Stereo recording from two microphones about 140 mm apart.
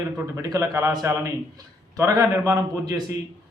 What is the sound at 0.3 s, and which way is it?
A man's voice, 25° right (ahead or behind).